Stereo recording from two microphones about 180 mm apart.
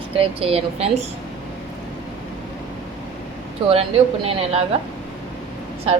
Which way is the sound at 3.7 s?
35° right (ahead or behind).